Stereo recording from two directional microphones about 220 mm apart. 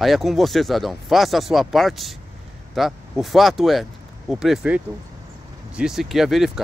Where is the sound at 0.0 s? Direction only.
Centre (ahead or behind).